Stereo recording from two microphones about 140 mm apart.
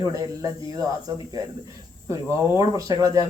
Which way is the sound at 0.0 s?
25° right (ahead or behind).